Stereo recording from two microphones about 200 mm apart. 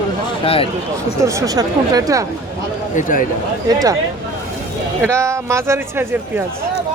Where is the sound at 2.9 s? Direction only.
40° left (ahead or behind).